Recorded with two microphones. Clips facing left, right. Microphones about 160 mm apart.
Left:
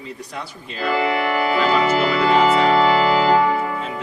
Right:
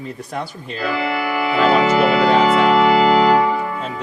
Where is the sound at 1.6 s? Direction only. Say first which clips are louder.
Right 6 dB; 50° right (ahead or behind).